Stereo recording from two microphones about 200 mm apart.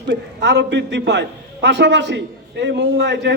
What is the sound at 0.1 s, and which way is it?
A man's voice, 60° right (ahead or behind).